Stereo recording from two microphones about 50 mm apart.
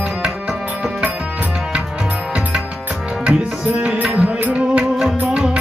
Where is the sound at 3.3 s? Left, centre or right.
Right.